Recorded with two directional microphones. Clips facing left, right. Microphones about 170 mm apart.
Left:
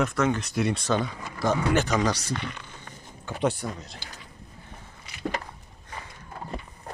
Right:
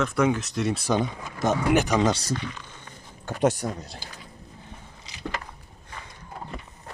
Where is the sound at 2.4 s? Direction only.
65° left (ahead or behind).